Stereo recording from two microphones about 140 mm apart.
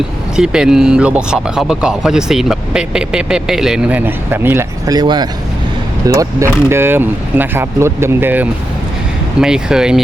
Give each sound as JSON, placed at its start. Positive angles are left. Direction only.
{"t": 0.3, "sound": "speech", "side_deg": -5}
{"t": 4.9, "sound": "speech", "side_deg": -30}
{"t": 6.1, "sound": "speech", "side_deg": -20}